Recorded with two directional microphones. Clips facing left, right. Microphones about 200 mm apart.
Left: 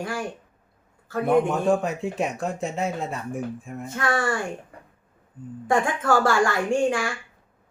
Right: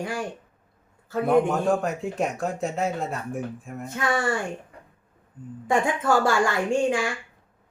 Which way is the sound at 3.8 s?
15° right (ahead or behind).